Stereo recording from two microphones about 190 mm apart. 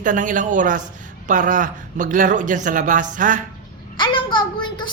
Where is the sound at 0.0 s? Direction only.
45° right (ahead or behind).